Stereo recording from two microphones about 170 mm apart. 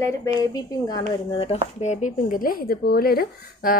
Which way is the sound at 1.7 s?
45° left (ahead or behind).